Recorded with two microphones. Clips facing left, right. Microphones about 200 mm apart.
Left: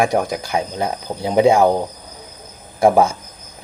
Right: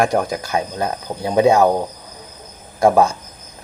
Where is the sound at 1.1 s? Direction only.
15° left (ahead or behind).